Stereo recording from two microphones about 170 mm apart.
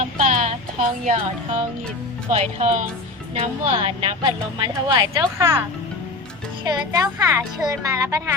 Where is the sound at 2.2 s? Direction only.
40° right (ahead or behind).